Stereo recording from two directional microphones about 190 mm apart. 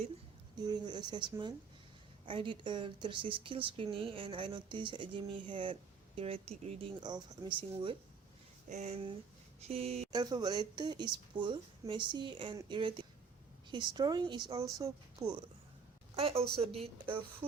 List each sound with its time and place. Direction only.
0.5 s a woman's voice: 20° right (ahead or behind)
7.0 s a woman's voice: 25° right (ahead or behind)
10.1 s speech: 20° right (ahead or behind)
16.1 s a woman's voice: 30° right (ahead or behind)